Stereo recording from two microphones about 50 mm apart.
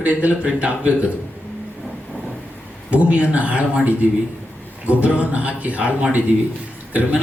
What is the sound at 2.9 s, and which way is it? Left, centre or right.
Speech, right.